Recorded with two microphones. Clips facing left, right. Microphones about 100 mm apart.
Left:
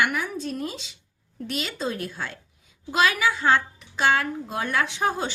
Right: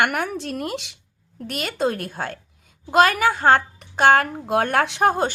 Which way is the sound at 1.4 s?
55° right (ahead or behind).